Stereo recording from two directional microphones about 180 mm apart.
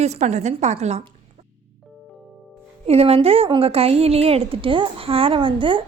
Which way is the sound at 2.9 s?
35° right (ahead or behind).